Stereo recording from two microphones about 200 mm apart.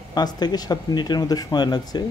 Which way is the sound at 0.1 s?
20° left (ahead or behind).